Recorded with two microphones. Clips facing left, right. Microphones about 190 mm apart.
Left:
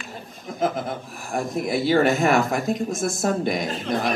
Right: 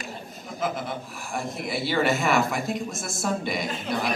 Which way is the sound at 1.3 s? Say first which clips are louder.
Left 6 dB; 50° left (ahead or behind).